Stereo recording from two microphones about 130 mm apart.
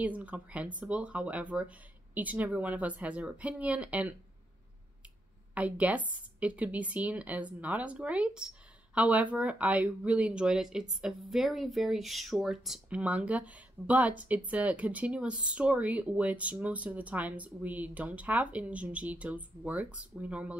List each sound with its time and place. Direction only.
0.0 s a woman's voice: 10° right (ahead or behind)
5.5 s a woman's voice: 10° right (ahead or behind)